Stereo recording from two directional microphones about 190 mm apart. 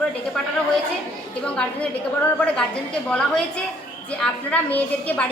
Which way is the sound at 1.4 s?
5° left (ahead or behind).